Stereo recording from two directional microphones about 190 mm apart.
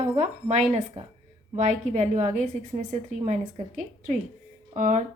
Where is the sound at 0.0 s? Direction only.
35° right (ahead or behind).